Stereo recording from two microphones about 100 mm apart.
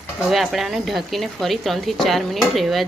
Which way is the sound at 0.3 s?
Centre (ahead or behind).